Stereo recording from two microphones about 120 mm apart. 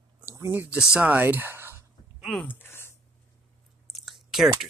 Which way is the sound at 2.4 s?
20° left (ahead or behind).